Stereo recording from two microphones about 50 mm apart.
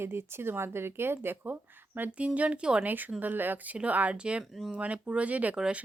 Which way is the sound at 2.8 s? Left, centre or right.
Right.